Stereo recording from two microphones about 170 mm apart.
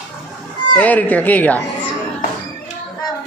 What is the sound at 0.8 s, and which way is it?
Speech, 10° left (ahead or behind).